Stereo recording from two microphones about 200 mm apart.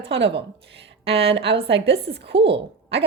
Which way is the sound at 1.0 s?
30° right (ahead or behind).